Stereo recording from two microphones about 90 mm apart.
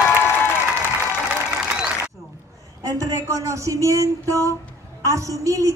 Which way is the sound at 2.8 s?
40° right (ahead or behind).